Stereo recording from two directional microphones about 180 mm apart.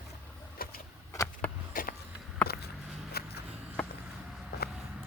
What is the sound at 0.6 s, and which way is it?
Vehicle, 55° left (ahead or behind).